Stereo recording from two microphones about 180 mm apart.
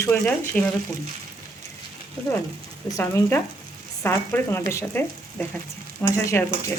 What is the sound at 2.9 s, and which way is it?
Speech, 15° left (ahead or behind).